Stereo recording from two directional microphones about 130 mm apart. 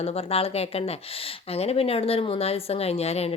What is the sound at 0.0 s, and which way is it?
A woman's voice, 50° left (ahead or behind).